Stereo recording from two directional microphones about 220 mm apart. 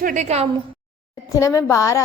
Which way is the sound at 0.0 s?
35° right (ahead or behind).